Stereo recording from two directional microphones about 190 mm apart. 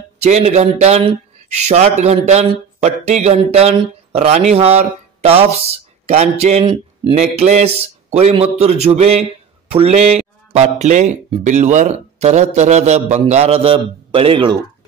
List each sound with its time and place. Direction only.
0.2 s speech: 35° right (ahead or behind)